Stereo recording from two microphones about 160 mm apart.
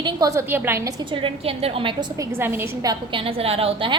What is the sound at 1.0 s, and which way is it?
A woman's voice, 30° right (ahead or behind).